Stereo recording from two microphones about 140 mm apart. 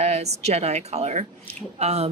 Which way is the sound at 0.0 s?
50° right (ahead or behind).